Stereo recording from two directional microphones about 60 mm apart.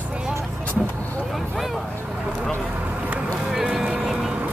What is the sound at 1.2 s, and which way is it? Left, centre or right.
Speech, centre.